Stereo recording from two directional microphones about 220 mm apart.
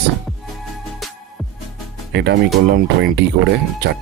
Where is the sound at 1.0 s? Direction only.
Centre (ahead or behind).